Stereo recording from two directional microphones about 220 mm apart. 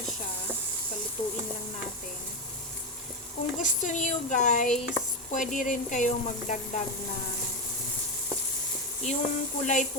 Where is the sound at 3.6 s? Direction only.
35° left (ahead or behind).